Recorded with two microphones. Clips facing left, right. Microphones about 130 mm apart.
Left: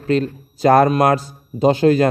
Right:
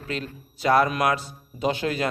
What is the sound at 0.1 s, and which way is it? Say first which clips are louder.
A man's voice: left 14 dB; 40° left (ahead or behind).